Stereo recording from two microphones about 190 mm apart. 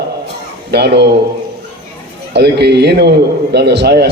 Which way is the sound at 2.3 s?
60° right (ahead or behind).